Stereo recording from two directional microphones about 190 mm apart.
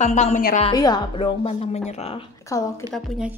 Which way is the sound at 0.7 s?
20° left (ahead or behind).